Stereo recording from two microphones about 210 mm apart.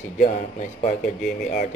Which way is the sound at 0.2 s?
40° left (ahead or behind).